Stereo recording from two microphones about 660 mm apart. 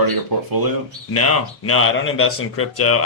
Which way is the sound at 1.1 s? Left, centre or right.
Left.